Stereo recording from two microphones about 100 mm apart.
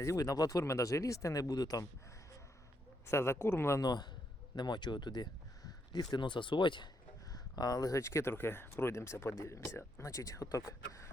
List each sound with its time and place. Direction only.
0.0 s speech: 35° left (ahead or behind)
3.1 s speech: 25° left (ahead or behind)
3.8 s a man's voice: 45° left (ahead or behind)
7.3 s speech: 40° left (ahead or behind)